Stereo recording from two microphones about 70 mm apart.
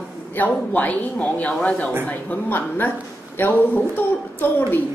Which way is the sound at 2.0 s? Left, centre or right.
Left.